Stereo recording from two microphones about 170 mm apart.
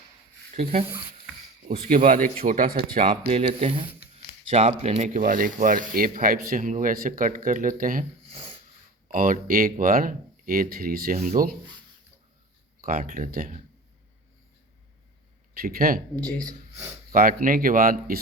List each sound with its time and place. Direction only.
1.6 s speech: 55° right (ahead or behind)
3.2 s speech: 35° right (ahead or behind); by 8.0 s 55° right (ahead or behind)
9.1 s speech: 55° right (ahead or behind)
12.8 s speech: 55° right (ahead or behind)
15.6 s speech: 60° right (ahead or behind)
16.1 s speech: 5° left (ahead or behind)
17.1 s speech: 55° right (ahead or behind)